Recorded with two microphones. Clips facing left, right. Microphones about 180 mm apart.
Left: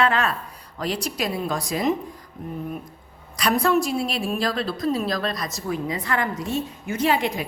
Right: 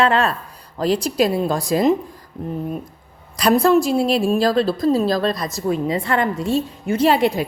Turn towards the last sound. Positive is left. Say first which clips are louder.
# right 6 dB
turn(degrees=-30)  # may be behind; listen again after turning